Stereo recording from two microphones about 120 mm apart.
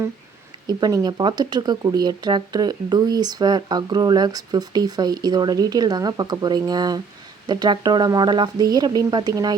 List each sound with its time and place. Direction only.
0.7 s speech: 30° right (ahead or behind)